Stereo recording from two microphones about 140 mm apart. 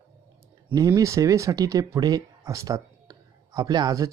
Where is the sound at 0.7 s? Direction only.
25° right (ahead or behind).